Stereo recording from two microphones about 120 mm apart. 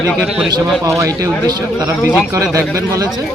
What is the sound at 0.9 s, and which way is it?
Speech, 25° right (ahead or behind).